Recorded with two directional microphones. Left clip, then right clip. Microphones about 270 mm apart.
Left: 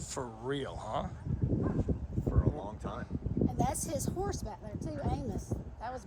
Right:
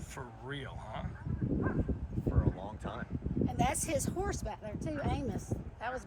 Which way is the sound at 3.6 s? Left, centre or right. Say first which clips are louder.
Right 6 dB; right.